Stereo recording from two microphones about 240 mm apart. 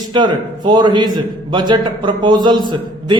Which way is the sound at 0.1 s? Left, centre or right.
Centre.